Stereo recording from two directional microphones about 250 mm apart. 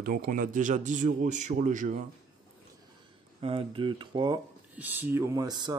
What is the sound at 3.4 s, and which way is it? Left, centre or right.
Speech, right.